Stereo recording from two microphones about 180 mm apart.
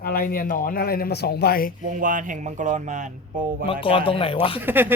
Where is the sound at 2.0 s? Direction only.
45° right (ahead or behind).